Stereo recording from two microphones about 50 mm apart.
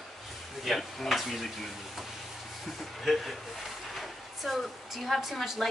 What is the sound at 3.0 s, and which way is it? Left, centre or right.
Speech, centre.